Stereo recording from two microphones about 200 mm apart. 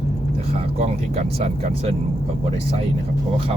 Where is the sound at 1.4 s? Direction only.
30° right (ahead or behind).